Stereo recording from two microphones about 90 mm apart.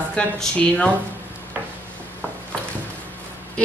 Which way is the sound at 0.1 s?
10° left (ahead or behind).